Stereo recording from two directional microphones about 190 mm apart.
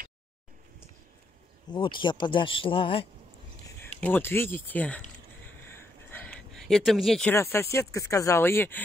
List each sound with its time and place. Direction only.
1.7 s speech: 25° left (ahead or behind)
4.0 s speech: 10° left (ahead or behind)
5.7 s a sound: 10° left (ahead or behind)
7.5 s speech: 15° left (ahead or behind)